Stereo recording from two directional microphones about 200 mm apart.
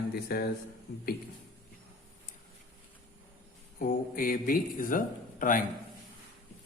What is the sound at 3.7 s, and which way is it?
A man's voice, 45° left (ahead or behind).